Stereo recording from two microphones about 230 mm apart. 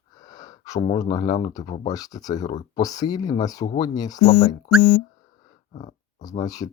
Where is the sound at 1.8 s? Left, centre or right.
Centre.